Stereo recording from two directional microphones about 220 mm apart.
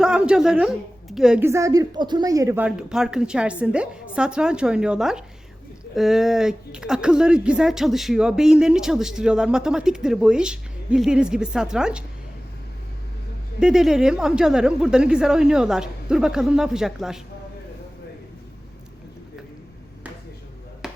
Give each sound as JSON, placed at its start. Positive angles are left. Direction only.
{"t": 0.0, "sound": "speech", "side_deg": -5}
{"t": 13.6, "sound": "speech", "side_deg": -5}
{"t": 20.8, "sound": "chop", "side_deg": 0}